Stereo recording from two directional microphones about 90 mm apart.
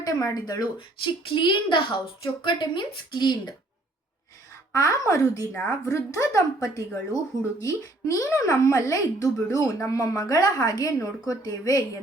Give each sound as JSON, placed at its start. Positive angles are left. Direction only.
{"t": 0.0, "sound": "speech", "side_deg": 45}
{"t": 1.0, "sound": "a woman's voice", "side_deg": 65}
{"t": 4.7, "sound": "speech", "side_deg": 35}
{"t": 5.5, "sound": "a woman's voice", "side_deg": 20}
{"t": 5.8, "sound": "speech", "side_deg": 35}